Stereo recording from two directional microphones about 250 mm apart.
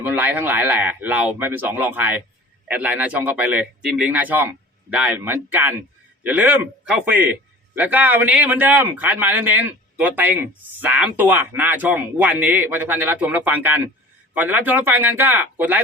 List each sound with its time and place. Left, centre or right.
0.0 s a man's voice: centre